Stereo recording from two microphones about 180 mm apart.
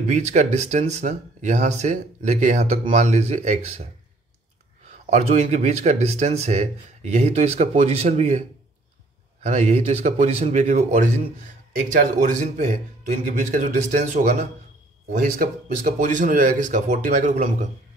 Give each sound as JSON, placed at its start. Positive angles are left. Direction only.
{"t": 0.0, "sound": "speech", "side_deg": -40}
{"t": 5.1, "sound": "a man's voice", "side_deg": -40}